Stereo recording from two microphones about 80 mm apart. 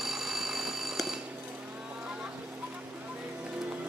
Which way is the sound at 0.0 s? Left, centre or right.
Centre.